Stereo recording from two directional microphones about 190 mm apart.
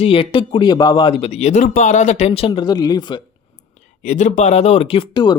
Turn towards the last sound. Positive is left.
turn(degrees=25)  # may be behind; listen again after turning